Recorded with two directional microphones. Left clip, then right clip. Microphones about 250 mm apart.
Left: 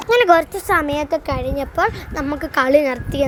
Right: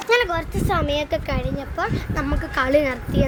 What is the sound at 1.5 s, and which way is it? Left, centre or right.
Speech, left.